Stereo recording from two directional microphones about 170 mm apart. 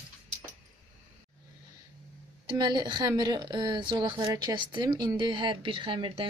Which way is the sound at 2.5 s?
25° right (ahead or behind).